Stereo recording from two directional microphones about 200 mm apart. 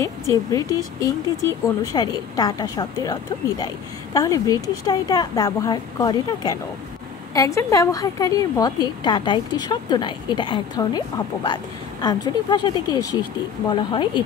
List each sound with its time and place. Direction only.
0.5 s a woman's voice: 15° left (ahead or behind)